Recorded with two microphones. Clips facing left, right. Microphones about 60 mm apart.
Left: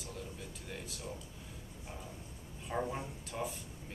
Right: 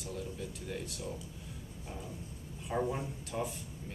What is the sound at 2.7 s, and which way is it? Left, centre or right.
Speech, centre.